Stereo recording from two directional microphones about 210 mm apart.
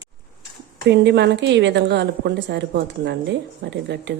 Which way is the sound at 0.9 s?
55° right (ahead or behind).